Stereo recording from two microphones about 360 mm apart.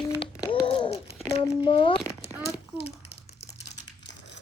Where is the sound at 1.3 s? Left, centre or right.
Centre.